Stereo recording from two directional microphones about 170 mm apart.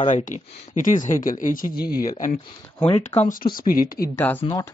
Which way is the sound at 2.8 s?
35° left (ahead or behind).